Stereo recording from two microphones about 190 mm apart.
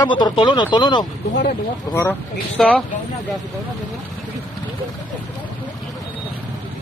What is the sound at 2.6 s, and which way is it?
Speech, 5° left (ahead or behind).